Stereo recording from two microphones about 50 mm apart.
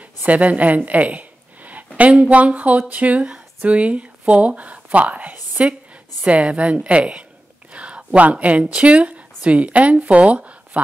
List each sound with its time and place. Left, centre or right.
0.2 s a woman's voice: right